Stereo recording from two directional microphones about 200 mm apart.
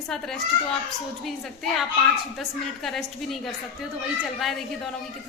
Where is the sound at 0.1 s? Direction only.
5° left (ahead or behind).